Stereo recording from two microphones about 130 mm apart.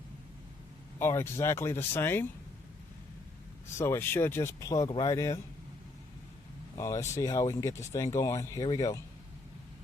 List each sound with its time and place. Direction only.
0.9 s speech: 20° left (ahead or behind)
3.8 s speech: 20° left (ahead or behind)
6.7 s speech: 25° left (ahead or behind)